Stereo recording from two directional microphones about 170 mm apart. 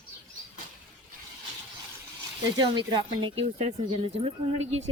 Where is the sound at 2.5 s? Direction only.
25° right (ahead or behind).